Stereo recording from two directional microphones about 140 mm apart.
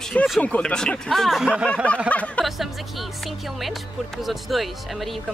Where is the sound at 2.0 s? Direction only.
10° left (ahead or behind).